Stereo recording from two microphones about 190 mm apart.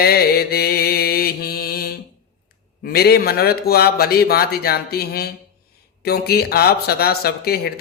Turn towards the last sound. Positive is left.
turn(degrees=55)  # may be behind; listen again after turning